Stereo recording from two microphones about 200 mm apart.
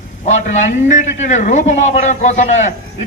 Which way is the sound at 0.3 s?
35° left (ahead or behind).